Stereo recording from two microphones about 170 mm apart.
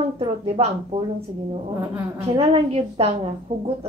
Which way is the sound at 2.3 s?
35° right (ahead or behind).